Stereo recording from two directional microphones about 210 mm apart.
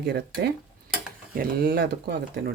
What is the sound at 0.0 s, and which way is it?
Speech, 50° right (ahead or behind).